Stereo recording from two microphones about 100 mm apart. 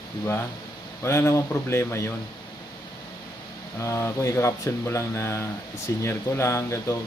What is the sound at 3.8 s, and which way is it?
Speech, 25° left (ahead or behind).